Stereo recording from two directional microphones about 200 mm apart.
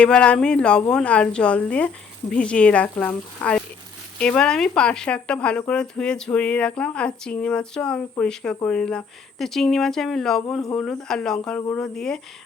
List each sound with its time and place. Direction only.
0.0 s speech: 5° left (ahead or behind)